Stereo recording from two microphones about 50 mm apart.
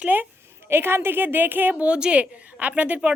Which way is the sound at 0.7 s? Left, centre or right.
Right.